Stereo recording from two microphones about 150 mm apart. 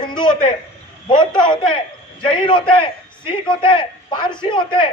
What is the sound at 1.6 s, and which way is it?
A man's voice, 35° left (ahead or behind).